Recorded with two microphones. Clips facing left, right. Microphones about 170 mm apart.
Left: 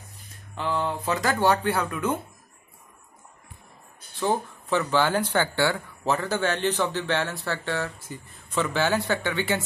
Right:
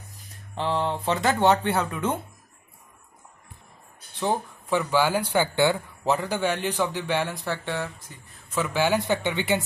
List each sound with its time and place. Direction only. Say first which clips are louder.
0.6 s speech: right 1 dB; 30° right (ahead or behind)
4.2 s speech: left 1 dB; 15° right (ahead or behind)
8.1 s speech: left 2 dB; 5° right (ahead or behind)